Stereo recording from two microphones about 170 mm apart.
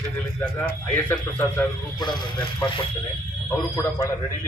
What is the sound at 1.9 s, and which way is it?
Speech, 25° left (ahead or behind).